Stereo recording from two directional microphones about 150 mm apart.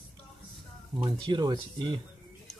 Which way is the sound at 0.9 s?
30° right (ahead or behind).